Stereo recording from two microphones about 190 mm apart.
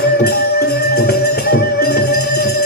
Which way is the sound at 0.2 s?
55° left (ahead or behind).